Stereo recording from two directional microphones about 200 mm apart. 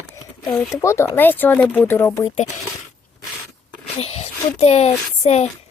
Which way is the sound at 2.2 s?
35° left (ahead or behind).